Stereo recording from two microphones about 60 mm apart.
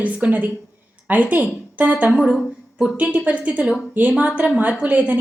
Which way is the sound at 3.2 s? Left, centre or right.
Right.